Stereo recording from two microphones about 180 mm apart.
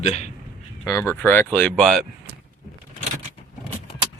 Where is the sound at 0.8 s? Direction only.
15° left (ahead or behind).